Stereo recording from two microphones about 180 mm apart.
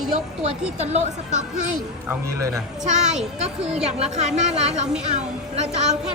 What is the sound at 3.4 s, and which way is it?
A woman's voice, 35° right (ahead or behind).